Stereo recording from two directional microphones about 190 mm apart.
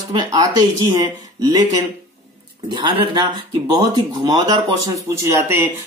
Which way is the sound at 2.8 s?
25° right (ahead or behind).